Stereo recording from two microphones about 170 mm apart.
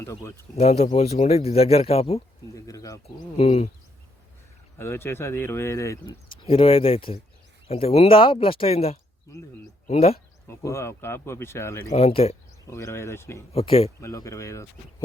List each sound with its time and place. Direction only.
0.0 s speech: 15° left (ahead or behind)
0.5 s speech: 40° left (ahead or behind)
2.6 s speech: 20° left (ahead or behind)
3.3 s speech: 40° left (ahead or behind)
4.8 s speech: 15° left (ahead or behind)
6.5 s speech: 35° left (ahead or behind)
10.5 s speech: 15° left (ahead or behind)
11.9 s speech: 40° left (ahead or behind)
12.7 s speech: 15° left (ahead or behind)
13.5 s speech: 35° left (ahead or behind)
14.0 s speech: 20° left (ahead or behind)